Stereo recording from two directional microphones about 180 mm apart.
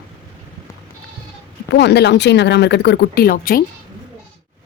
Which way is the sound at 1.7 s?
70° left (ahead or behind).